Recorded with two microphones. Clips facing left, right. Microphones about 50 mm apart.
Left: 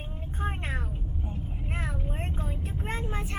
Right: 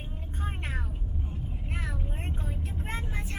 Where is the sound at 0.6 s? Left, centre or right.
Left.